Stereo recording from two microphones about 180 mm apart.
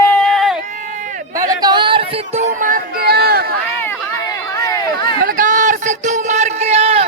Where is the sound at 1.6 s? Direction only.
25° right (ahead or behind).